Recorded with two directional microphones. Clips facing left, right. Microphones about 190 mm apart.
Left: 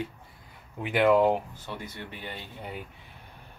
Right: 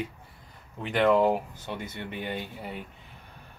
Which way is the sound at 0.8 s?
5° left (ahead or behind).